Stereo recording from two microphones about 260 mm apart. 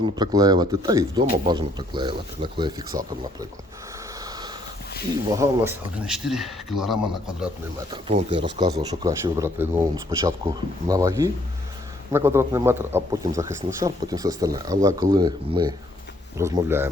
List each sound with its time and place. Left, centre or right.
0.0 s a man's voice: centre
5.4 s speech: centre
7.9 s a man's voice: centre